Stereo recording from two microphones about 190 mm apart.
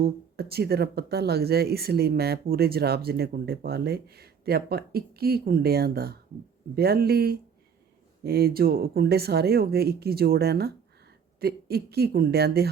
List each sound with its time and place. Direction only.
0.0 s speech: 55° right (ahead or behind)